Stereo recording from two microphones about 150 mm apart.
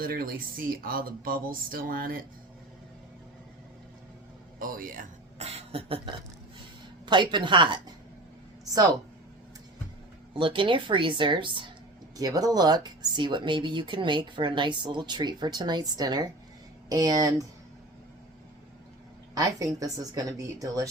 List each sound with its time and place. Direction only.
0.0 s speech: 80° right
4.6 s speech: 65° right (ahead or behind)
5.4 s a sound: 45° right (ahead or behind)
7.0 s speech: 30° right (ahead or behind)
10.3 s speech: 35° right (ahead or behind)
19.3 s speech: 20° right (ahead or behind)